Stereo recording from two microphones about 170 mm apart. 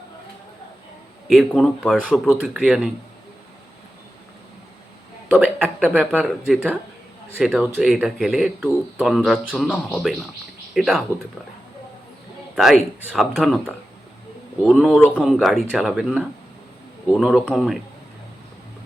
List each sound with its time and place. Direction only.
1.3 s speech: centre (ahead or behind)
5.3 s speech: 10° right (ahead or behind)
12.5 s speech: centre (ahead or behind)
14.7 s speech: centre (ahead or behind)